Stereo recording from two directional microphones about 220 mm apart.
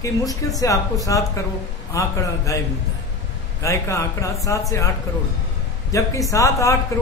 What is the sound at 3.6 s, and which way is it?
A man's voice, 15° left (ahead or behind).